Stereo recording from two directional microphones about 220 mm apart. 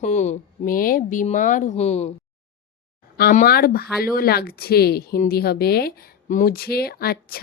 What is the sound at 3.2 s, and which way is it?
Speech, 45° left (ahead or behind).